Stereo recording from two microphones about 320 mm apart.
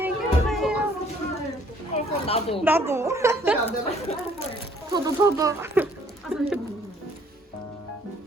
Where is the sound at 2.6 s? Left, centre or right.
Centre.